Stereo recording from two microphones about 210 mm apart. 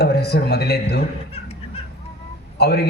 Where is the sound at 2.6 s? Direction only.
50° left (ahead or behind).